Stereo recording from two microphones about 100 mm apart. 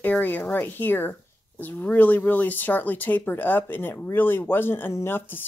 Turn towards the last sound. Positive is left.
turn(degrees=20)  # may be behind; listen again after turning